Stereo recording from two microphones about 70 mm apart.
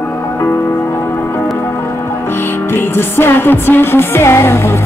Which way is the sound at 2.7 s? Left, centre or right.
Left.